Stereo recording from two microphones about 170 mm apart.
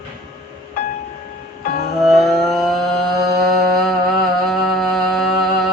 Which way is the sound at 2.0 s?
Centre (ahead or behind).